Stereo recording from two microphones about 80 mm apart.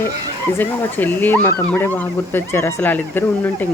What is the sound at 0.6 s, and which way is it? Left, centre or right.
Speech, left.